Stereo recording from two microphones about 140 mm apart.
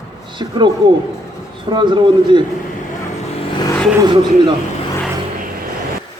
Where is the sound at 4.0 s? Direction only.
30° right (ahead or behind).